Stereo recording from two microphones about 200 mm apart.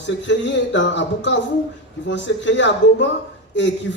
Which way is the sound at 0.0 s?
65° left (ahead or behind).